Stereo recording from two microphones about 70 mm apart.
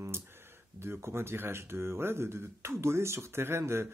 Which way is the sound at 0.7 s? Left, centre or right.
Right.